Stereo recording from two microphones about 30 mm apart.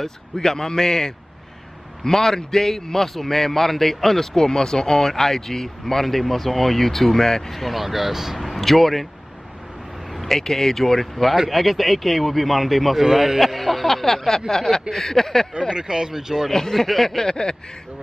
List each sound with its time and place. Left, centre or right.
0.0 s a man's voice: centre
8.4 s speech: centre
10.2 s a man's voice: centre
13.0 s a man's voice: centre
13.4 s a man's voice: centre
15.7 s speech: right
16.7 s speech: centre
17.2 s speech: left